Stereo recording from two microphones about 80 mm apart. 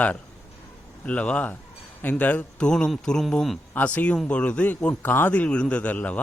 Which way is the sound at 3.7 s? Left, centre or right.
Centre.